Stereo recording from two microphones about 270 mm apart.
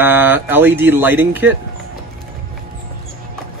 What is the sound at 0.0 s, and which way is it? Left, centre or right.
Speech, centre.